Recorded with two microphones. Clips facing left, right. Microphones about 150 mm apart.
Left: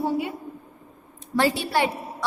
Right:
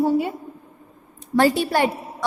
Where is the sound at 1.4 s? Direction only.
45° right (ahead or behind).